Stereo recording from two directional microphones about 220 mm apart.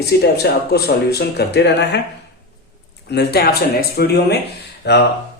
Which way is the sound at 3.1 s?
45° left (ahead or behind).